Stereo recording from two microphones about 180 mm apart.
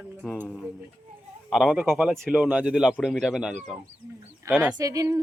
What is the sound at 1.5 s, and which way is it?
Speech, 5° right (ahead or behind).